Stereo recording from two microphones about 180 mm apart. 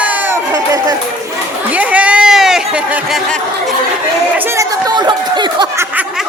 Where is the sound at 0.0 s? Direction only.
10° right (ahead or behind).